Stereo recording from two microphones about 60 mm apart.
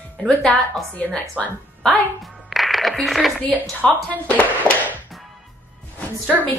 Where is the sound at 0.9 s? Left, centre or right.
Left.